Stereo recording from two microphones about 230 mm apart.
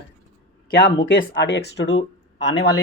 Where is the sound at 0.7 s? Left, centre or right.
Left.